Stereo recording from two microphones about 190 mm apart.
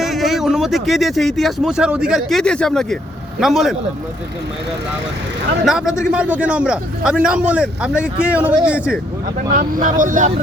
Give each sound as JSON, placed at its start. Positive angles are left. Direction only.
{"t": 0.0, "sound": "speech", "side_deg": 0}
{"t": 5.6, "sound": "speech", "side_deg": -5}
{"t": 9.6, "sound": "speech", "side_deg": -45}